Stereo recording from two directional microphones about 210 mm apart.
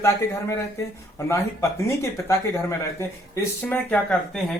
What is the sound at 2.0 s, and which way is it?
Speech, 15° left (ahead or behind).